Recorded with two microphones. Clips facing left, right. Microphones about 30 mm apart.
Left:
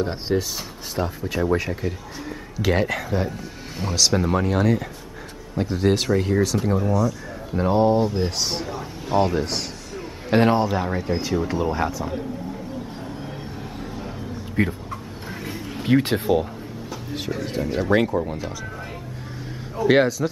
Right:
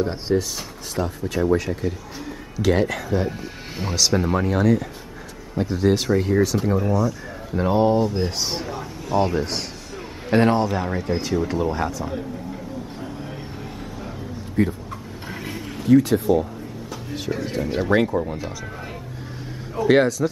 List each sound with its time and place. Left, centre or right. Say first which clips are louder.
0.0 s speech: right 1 dB; centre
3.3 s speech: right 2 dB; centre
6.8 s speech: even; centre
7.6 s speech: even; centre
9.2 s a sound: even; centre
10.3 s speech: even; centre
14.6 s speech: right 2 dB; left
15.2 s a sound: right 1 dB; centre
15.8 s speech: right 4 dB; left
17.3 s speech: right 1 dB; centre
19.9 s speech: right 1 dB; centre